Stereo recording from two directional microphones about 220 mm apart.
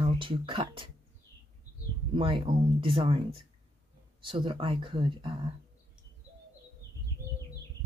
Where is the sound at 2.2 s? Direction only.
25° right (ahead or behind).